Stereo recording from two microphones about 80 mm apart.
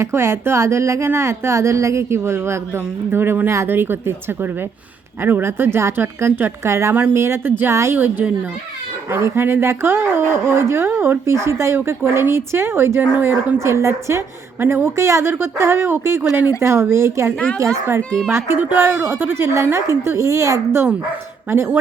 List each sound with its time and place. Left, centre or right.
0.0 s a woman's voice: right
13.6 s a woman's voice: right
18.1 s speech: centre
18.3 s a woman's voice: right